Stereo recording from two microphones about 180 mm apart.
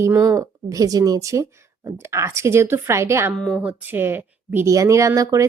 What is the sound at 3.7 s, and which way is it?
A woman's voice, 10° right (ahead or behind).